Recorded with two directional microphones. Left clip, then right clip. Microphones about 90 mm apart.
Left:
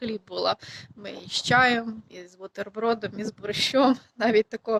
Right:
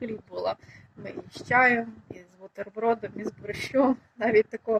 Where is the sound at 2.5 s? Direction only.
25° left (ahead or behind).